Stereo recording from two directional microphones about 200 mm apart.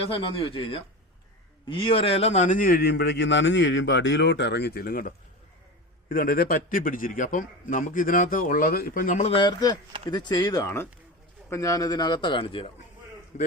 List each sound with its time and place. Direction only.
0.1 s a man's voice: 25° left (ahead or behind)